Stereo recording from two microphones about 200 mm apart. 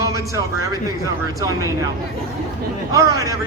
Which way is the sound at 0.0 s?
15° right (ahead or behind).